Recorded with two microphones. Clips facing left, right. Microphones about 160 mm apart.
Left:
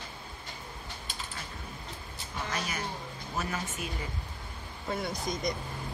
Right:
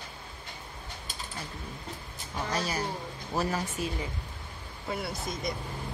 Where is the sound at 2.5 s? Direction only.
35° right (ahead or behind).